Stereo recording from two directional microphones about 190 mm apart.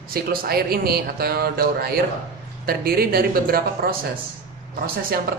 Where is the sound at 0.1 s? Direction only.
50° right (ahead or behind).